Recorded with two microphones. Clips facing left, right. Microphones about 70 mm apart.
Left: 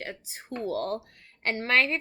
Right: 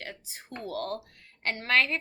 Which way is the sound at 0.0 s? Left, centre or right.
Left.